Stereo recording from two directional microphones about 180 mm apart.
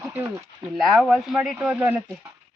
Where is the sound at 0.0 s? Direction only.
15° right (ahead or behind).